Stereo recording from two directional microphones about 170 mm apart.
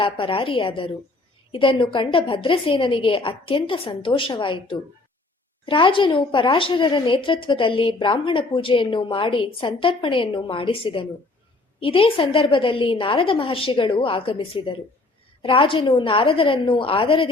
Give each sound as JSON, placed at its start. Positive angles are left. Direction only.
{"t": 0.0, "sound": "a woman's voice", "side_deg": 30}